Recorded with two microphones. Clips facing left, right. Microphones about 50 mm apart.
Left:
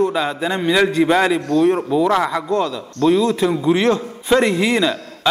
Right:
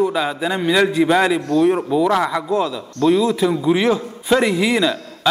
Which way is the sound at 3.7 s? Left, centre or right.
Centre.